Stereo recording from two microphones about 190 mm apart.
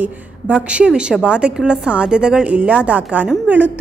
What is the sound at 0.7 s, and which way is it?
A woman's voice, 5° right (ahead or behind).